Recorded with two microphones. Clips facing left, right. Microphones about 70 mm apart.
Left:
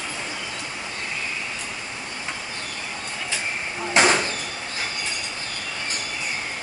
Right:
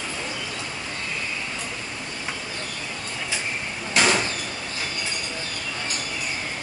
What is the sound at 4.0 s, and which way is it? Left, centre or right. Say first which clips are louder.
Sliding door: left 3 dB; left.